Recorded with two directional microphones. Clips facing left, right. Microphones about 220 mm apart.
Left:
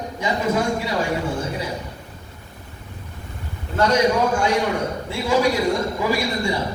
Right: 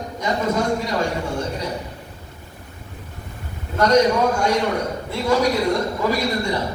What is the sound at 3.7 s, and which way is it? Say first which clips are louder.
Speech: right 2 dB; 10° left (ahead or behind).